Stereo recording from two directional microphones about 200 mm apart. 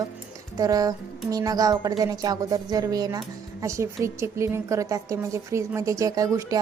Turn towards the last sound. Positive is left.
turn(degrees=-15)  # may be behind; listen again after turning